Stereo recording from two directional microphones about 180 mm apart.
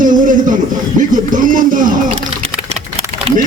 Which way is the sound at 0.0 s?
45° right (ahead or behind).